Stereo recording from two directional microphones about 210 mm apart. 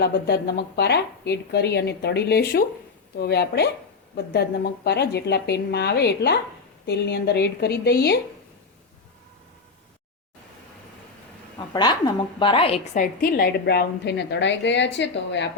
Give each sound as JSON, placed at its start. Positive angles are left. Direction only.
{"t": 0.0, "sound": "a woman's voice", "side_deg": 50}
{"t": 11.7, "sound": "a woman's voice", "side_deg": 20}